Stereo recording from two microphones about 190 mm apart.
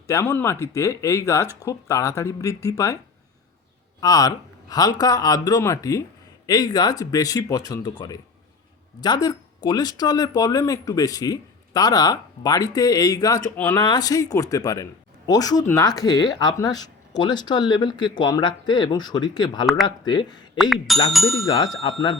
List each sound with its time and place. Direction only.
0.1 s speech: 15° left (ahead or behind)
4.0 s speech: 20° left (ahead or behind)
21.1 s speech: centre (ahead or behind)
21.4 s speech: 25° left (ahead or behind)